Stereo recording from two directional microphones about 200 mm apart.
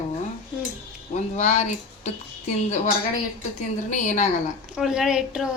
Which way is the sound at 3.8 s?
40° left (ahead or behind).